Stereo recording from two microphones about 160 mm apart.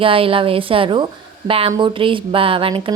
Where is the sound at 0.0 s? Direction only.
35° right (ahead or behind).